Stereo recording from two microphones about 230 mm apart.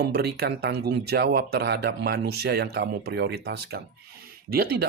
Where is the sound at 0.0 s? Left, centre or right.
Right.